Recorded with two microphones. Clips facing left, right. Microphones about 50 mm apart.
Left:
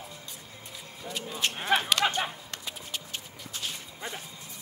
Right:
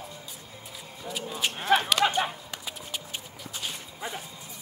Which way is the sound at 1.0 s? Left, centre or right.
Centre.